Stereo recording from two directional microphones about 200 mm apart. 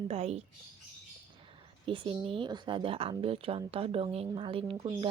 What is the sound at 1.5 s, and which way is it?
Speech, 25° right (ahead or behind).